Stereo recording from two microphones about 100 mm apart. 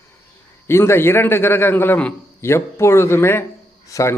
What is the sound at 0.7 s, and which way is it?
A man's voice, 25° left (ahead or behind).